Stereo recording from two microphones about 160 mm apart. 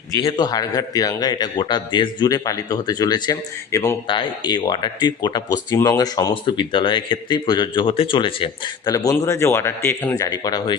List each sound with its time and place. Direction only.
0.3 s speech: 25° left (ahead or behind)
4.0 s speech: 30° left (ahead or behind)